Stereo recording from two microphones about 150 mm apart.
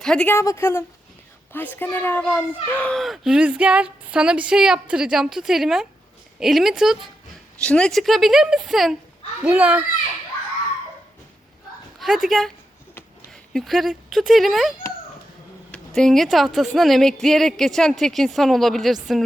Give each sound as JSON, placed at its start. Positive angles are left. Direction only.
{"t": 0.0, "sound": "a child's voice", "side_deg": 5}
{"t": 0.3, "sound": "a child's voice", "side_deg": 15}
{"t": 11.9, "sound": "a child's voice", "side_deg": 0}